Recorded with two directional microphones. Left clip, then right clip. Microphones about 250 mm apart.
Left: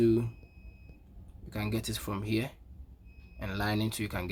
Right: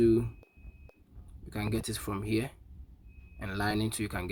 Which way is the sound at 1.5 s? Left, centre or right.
Centre.